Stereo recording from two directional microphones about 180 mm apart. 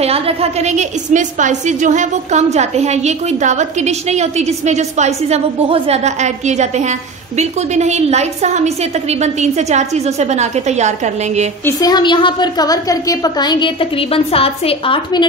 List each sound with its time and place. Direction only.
0.0 s a woman's voice: 35° right (ahead or behind)
11.6 s a woman's voice: 20° left (ahead or behind)